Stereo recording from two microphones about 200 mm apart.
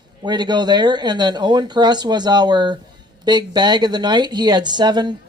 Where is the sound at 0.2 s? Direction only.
20° right (ahead or behind).